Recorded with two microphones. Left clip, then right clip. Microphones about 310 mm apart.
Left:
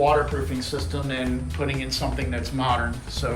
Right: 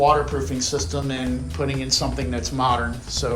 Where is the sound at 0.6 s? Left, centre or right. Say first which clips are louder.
Right 5 dB; centre.